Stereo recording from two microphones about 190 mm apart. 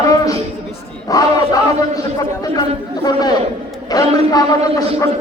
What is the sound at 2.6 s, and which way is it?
Chatter, 20° left (ahead or behind).